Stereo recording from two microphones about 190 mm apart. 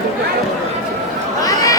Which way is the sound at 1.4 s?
20° left (ahead or behind).